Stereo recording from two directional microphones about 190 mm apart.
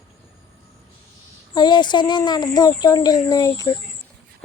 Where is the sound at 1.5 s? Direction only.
25° left (ahead or behind).